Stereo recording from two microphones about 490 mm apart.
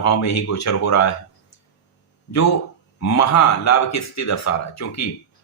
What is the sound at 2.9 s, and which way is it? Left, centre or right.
Speech, left.